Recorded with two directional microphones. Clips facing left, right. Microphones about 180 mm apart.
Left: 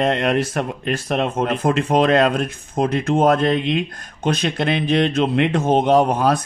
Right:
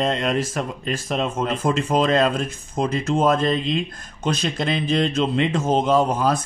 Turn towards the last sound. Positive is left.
turn(degrees=65)  # may be behind; listen again after turning